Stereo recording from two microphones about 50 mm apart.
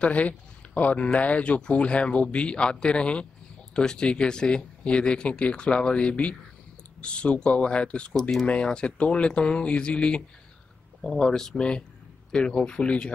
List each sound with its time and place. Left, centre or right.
0.0 s speech: left
8.2 s speech: centre
8.5 s speech: centre